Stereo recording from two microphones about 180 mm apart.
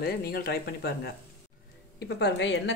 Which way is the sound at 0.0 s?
60° left (ahead or behind).